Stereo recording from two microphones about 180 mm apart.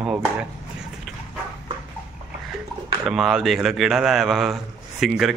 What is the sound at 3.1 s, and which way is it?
A man's voice, centre (ahead or behind).